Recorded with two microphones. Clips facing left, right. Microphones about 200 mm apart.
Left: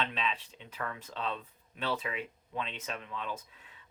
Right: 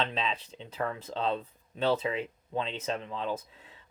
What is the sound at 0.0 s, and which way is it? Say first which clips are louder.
Speech: right 3 dB; 30° right (ahead or behind).